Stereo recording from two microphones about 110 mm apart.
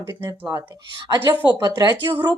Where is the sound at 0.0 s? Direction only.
25° right (ahead or behind).